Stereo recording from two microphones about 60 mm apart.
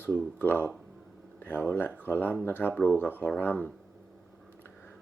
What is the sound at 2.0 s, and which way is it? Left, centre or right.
Speech, left.